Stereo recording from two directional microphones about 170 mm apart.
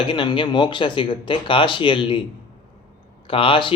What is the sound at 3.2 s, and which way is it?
Speech, 30° left (ahead or behind).